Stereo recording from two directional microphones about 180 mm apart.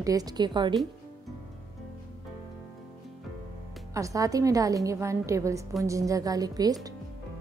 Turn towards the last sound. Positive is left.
turn(degrees=-20)  # may be behind; listen again after turning